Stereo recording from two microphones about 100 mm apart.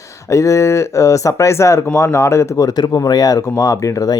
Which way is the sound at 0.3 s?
30° left (ahead or behind).